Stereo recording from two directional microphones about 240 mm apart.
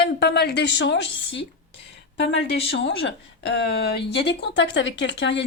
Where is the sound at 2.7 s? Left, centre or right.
Left.